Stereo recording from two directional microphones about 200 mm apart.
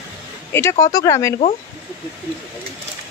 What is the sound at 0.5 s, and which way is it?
Speech, 15° left (ahead or behind).